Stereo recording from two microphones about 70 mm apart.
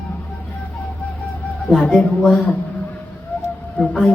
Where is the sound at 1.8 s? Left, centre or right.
Centre.